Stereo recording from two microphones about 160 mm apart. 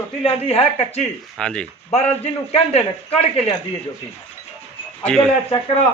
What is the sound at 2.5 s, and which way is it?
Speech, 40° left (ahead or behind).